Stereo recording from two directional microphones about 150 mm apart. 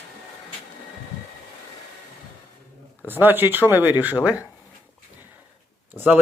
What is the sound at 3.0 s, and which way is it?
Speech, 15° right (ahead or behind).